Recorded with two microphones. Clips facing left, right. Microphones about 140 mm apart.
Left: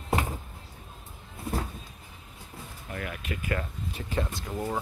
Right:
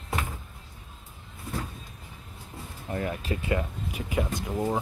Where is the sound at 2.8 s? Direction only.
30° right (ahead or behind).